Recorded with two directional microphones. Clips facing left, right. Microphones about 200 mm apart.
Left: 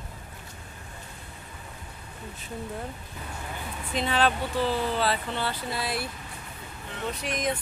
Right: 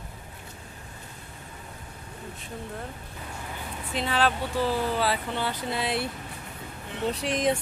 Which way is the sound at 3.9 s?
Centre (ahead or behind).